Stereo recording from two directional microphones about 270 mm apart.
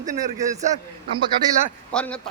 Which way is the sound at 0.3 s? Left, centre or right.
Right.